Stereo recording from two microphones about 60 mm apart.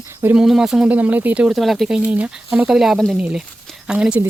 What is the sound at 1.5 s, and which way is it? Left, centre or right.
Speech, centre.